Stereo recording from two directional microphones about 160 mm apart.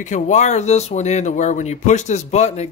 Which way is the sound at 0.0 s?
50° left (ahead or behind).